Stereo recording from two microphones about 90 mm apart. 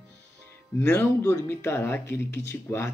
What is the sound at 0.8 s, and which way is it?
Speech, 20° left (ahead or behind).